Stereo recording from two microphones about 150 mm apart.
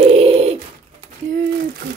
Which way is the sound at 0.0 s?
45° right (ahead or behind).